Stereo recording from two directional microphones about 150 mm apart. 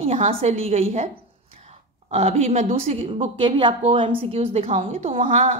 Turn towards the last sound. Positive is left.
turn(degrees=-50)  # may be behind; listen again after turning